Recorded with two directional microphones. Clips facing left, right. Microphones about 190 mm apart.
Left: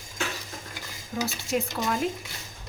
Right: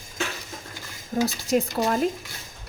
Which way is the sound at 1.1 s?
40° right (ahead or behind).